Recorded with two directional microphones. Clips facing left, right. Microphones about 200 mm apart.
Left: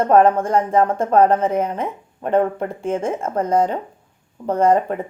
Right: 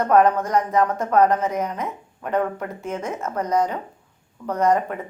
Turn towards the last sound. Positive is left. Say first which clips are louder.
# left 4 dB
turn(degrees=30)  # may be behind; listen again after turning